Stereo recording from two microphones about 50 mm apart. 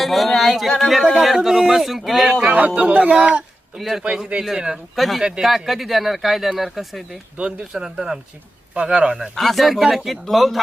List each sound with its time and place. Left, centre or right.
0.0 s speech: centre
2.5 s speech: right
3.8 s speech: centre
4.2 s speech: right
4.4 s speech: centre
4.9 s speech: centre
7.3 s speech: centre
9.3 s speech: centre